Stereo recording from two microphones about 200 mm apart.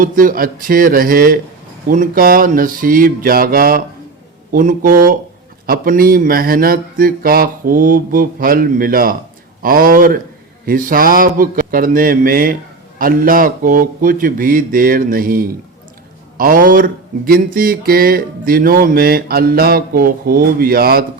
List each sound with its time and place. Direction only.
0.0 s speech: 45° right (ahead or behind)